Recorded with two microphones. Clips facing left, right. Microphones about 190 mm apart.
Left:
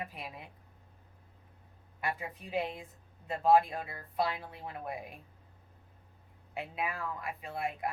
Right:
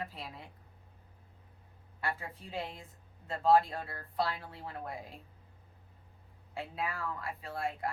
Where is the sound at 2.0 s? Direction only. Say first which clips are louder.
Left 1 dB; 15° left (ahead or behind).